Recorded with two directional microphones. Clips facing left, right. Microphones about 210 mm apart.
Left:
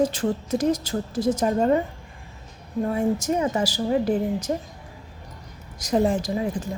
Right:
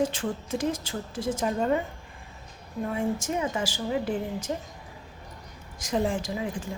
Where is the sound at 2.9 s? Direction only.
40° left (ahead or behind).